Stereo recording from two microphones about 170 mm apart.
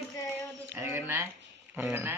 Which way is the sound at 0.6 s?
15° right (ahead or behind).